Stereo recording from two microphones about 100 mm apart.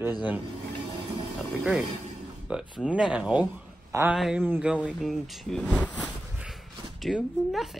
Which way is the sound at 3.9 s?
35° right (ahead or behind).